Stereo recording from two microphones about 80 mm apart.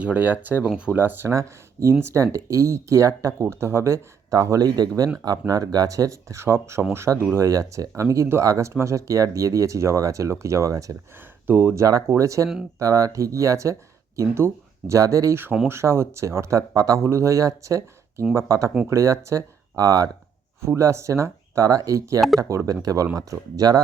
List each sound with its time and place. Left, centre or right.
0.0 s speech: right
1.0 s speech: right
1.3 s speech: right
4.3 s speech: right
11.4 s speech: right
15.6 s speech: right